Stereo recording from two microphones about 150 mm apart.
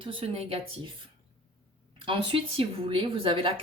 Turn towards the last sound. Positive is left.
turn(degrees=-35)  # may be behind; listen again after turning